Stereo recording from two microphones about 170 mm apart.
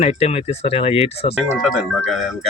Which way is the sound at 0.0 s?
40° left (ahead or behind).